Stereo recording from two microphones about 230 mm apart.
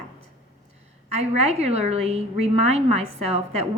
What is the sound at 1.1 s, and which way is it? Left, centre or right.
A woman's voice, right.